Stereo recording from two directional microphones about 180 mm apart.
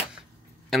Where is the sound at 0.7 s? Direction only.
Centre (ahead or behind).